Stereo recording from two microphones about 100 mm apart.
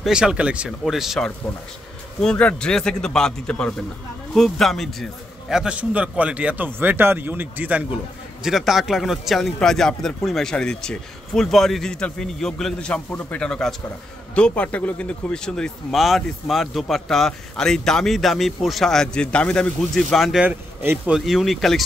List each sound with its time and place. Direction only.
0.0 s speech: 10° right (ahead or behind)
2.2 s a man's voice: 10° left (ahead or behind); by 8.0 s 15° right (ahead or behind)
8.5 s speech: 5° right (ahead or behind)
20.4 s speech: 25° right (ahead or behind)
21.1 s speech: centre (ahead or behind)